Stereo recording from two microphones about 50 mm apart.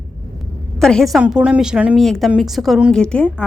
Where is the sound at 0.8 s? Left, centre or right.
Centre.